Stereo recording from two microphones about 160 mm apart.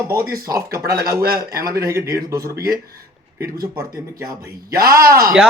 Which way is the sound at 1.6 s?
70° right (ahead or behind).